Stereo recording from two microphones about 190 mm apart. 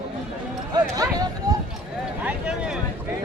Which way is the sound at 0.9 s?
20° right (ahead or behind).